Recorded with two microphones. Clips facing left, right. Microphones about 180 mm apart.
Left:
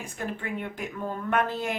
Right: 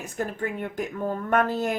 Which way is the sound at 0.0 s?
45° right (ahead or behind).